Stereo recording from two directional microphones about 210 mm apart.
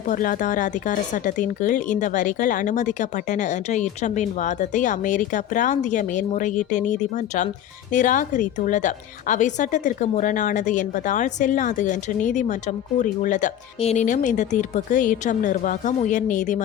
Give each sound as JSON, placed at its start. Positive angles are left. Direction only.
{"t": 0.1, "sound": "a woman's voice", "side_deg": 40}